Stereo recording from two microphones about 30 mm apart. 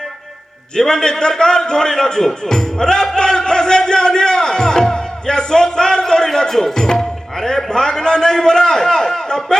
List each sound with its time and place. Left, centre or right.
0.9 s speech: left
3.2 s music: left
6.7 s speech: centre